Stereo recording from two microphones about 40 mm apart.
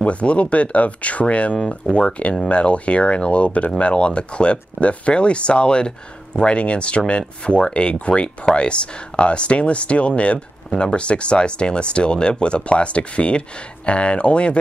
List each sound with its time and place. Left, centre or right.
0.0 s speech: left